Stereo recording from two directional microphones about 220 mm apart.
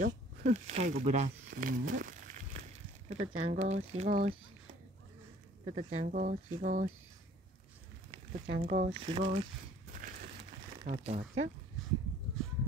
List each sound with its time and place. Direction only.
0.0 s speech: 35° right (ahead or behind)
3.1 s speech: 25° right (ahead or behind)
5.7 s speech: 30° right (ahead or behind)
8.3 s speech: 35° right (ahead or behind)
9.0 s speech: 25° right (ahead or behind)
9.9 s a sound: 35° right (ahead or behind)
10.9 s speech: 30° right (ahead or behind)